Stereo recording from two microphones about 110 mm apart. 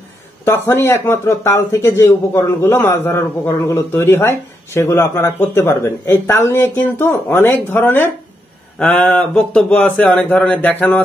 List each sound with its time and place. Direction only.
0.5 s speech: 25° left (ahead or behind)
8.7 s speech: 5° left (ahead or behind)